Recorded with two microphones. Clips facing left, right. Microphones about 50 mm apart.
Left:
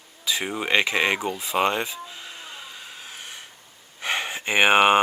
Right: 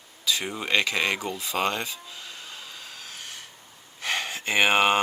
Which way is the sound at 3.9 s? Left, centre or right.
Centre.